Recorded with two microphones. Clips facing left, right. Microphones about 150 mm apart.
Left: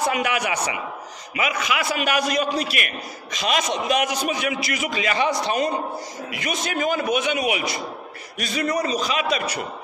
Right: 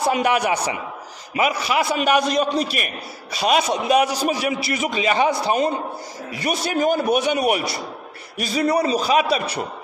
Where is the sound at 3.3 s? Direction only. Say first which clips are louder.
Right 4 dB; 40° right (ahead or behind).